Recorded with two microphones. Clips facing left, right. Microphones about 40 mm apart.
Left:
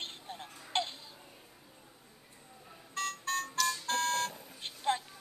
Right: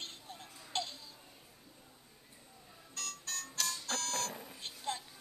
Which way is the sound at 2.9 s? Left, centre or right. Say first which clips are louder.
Left 10 dB; left.